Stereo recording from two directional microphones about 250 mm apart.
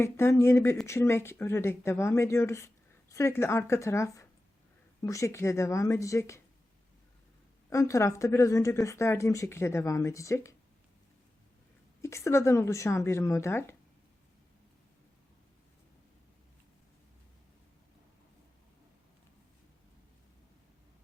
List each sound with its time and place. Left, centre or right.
0.0 s speech: centre
7.7 s speech: centre
12.0 s speech: centre